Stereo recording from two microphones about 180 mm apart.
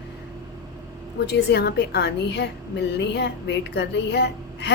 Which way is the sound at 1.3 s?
70° left (ahead or behind).